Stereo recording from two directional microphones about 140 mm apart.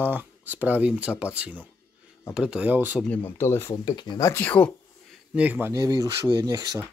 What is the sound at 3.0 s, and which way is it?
Speech, 15° left (ahead or behind).